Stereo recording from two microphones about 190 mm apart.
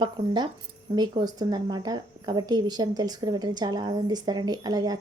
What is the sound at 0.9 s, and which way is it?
Speech, 20° right (ahead or behind).